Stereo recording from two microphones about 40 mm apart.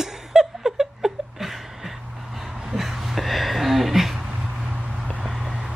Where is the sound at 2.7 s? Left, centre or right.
Centre.